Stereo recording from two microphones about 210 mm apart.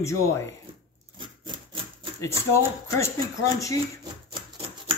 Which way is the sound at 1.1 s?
20° right (ahead or behind).